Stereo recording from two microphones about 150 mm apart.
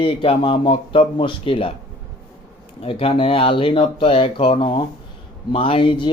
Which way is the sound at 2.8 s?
40° left (ahead or behind).